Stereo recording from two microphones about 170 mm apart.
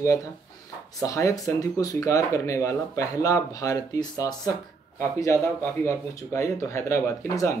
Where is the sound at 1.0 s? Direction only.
20° left (ahead or behind).